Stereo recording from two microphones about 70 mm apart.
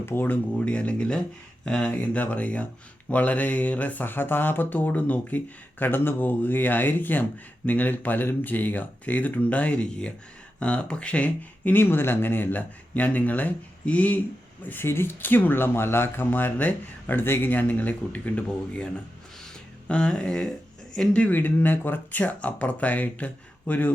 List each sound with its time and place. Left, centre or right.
0.0 s speech: left
0.6 s speech: centre
19.9 s speech: centre